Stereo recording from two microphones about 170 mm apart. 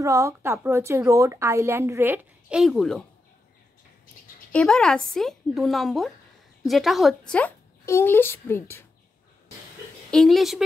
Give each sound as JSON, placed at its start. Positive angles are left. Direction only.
{"t": 0.0, "sound": "a woman's voice", "side_deg": -15}
{"t": 2.5, "sound": "a woman's voice", "side_deg": 0}
{"t": 4.5, "sound": "a woman's voice", "side_deg": 5}
{"t": 10.1, "sound": "a woman's voice", "side_deg": 0}